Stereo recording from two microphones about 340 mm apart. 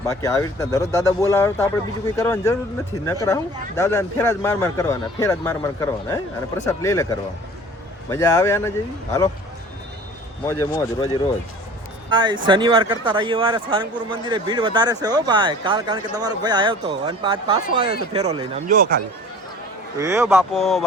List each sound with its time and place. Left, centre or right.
0.0 s speech: centre
10.4 s speech: centre
12.1 s speech: centre
20.0 s speech: centre